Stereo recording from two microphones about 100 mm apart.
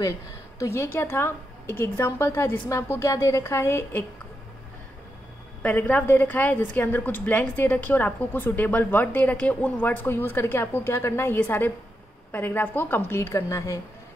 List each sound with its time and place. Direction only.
0.6 s a woman's voice: 25° left (ahead or behind)
5.6 s a woman's voice: 15° left (ahead or behind); by 13.7 s 30° left (ahead or behind)